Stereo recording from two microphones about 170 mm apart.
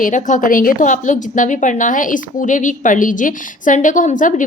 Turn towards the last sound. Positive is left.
turn(degrees=50)  # may be behind; listen again after turning